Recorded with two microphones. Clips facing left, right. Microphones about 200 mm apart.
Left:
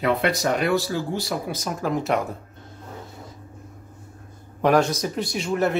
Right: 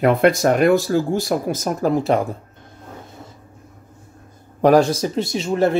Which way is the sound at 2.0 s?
30° right (ahead or behind).